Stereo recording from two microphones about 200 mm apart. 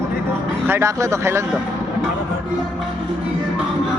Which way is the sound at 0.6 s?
10° right (ahead or behind).